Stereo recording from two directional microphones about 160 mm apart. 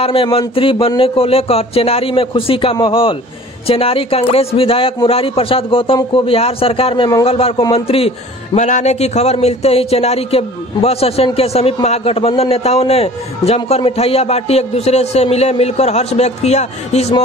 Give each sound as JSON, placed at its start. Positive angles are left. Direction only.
{"t": 0.0, "sound": "a man's voice", "side_deg": 35}